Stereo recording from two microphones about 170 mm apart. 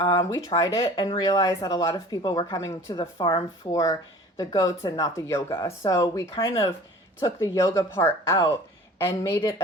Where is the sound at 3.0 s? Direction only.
30° left (ahead or behind).